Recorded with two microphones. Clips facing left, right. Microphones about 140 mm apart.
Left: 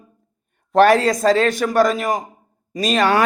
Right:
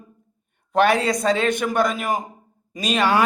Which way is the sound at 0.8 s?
40° left (ahead or behind).